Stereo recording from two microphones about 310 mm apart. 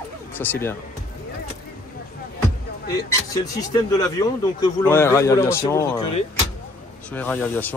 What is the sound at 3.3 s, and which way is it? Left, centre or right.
A man's voice, centre.